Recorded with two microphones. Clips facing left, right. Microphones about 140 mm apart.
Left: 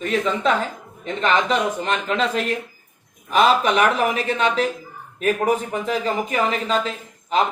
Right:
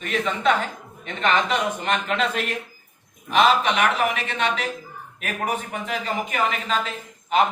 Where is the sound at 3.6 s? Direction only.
40° left (ahead or behind).